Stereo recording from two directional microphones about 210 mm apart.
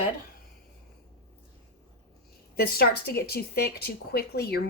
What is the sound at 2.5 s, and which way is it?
Speech, 45° left (ahead or behind).